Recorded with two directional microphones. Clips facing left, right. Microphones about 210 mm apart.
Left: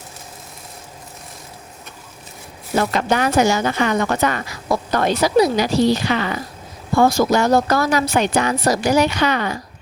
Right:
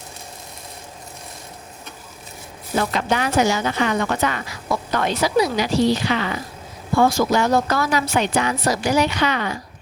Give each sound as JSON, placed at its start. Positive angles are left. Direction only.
{"t": 2.7, "sound": "speech", "side_deg": 45}